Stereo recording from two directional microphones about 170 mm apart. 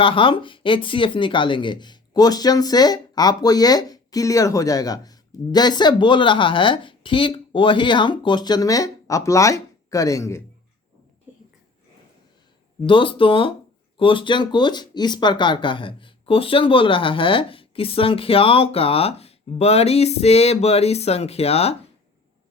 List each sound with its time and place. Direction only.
0.0 s speech: 30° left (ahead or behind)
12.8 s speech: 30° left (ahead or behind)